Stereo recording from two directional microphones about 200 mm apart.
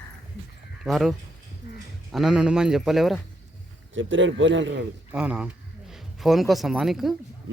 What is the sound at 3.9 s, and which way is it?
Speech, 70° right (ahead or behind).